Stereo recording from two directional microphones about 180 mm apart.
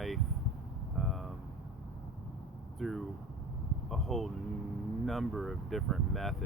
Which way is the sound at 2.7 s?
Centre (ahead or behind).